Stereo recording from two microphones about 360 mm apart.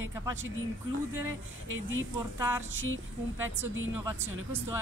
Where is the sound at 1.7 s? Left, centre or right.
Right.